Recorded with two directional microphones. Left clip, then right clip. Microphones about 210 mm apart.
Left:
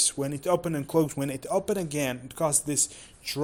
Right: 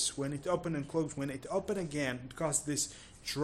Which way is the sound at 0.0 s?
30° left (ahead or behind).